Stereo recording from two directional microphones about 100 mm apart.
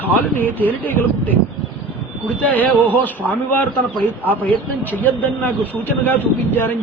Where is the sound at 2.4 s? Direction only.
15° left (ahead or behind).